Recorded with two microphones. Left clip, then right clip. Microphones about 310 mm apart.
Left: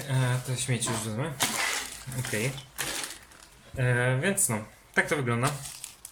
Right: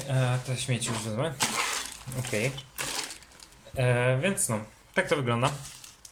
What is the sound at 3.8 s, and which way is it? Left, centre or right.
Speech, centre.